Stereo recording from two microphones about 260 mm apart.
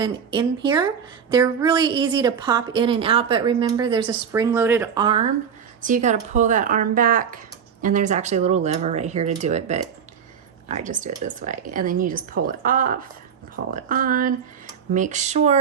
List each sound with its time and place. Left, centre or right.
0.0 s a woman's voice: centre